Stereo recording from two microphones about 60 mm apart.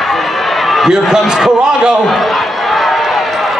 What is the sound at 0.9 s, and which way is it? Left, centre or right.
A man's voice, centre.